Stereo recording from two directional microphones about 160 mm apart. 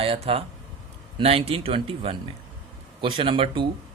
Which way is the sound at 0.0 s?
35° right (ahead or behind).